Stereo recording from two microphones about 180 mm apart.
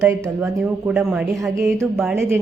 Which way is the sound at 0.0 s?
10° right (ahead or behind).